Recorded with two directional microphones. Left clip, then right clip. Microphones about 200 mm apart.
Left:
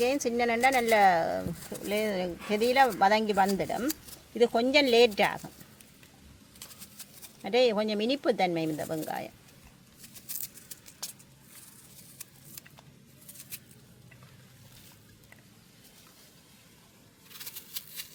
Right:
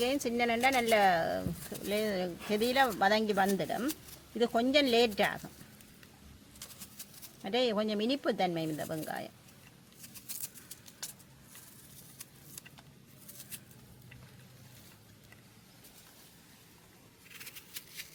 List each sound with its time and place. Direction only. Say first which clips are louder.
0.0 s speech: left 4 dB; 20° left (ahead or behind)
7.4 s speech: left 6 dB; 25° left (ahead or behind)